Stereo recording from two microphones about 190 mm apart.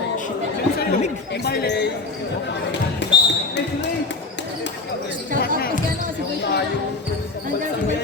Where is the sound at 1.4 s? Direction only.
60° left (ahead or behind).